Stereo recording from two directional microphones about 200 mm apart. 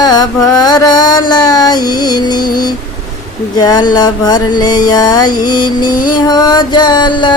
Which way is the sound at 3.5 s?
20° left (ahead or behind).